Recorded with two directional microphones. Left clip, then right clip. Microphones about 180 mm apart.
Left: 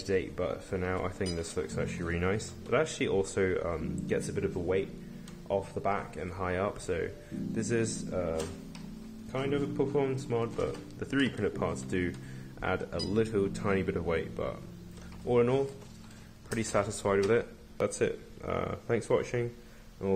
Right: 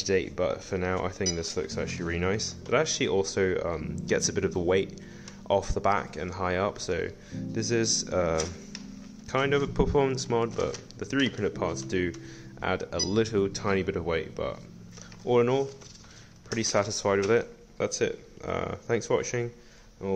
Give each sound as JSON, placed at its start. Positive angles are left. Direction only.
{"t": 0.0, "sound": "speech", "side_deg": -25}
{"t": 4.3, "sound": "speech", "side_deg": -30}
{"t": 8.1, "sound": "speech", "side_deg": -35}
{"t": 11.0, "sound": "speech", "side_deg": -20}